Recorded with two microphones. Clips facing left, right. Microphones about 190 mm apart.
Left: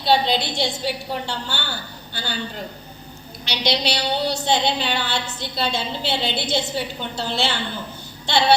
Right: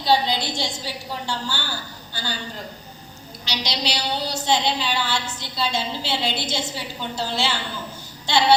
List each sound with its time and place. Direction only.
0.0 s a woman's voice: 60° left (ahead or behind)
3.4 s a woman's voice: 60° left (ahead or behind)